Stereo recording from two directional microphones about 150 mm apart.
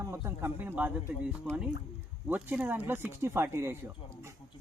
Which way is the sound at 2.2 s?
10° right (ahead or behind).